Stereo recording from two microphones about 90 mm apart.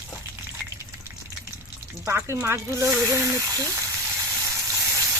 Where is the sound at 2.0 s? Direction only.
25° right (ahead or behind).